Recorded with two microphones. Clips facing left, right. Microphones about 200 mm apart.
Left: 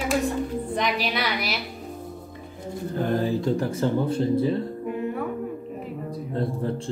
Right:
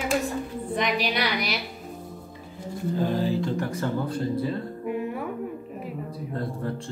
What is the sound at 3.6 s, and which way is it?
Speech, 25° left (ahead or behind).